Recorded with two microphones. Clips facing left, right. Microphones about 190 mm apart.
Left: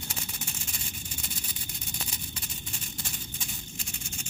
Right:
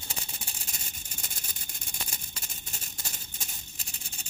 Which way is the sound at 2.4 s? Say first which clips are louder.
Left 5 dB; 45° right (ahead or behind).